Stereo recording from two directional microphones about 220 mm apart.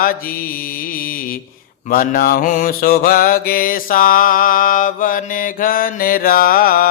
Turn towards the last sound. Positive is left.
turn(degrees=40)  # may be behind; listen again after turning